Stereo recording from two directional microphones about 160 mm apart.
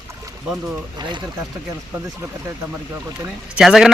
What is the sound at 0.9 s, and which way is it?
Speech, 25° right (ahead or behind).